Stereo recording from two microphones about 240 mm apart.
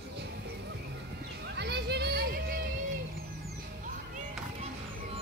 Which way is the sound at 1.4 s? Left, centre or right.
Right.